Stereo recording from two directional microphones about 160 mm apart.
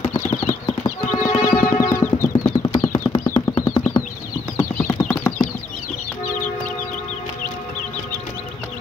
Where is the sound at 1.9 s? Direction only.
15° left (ahead or behind).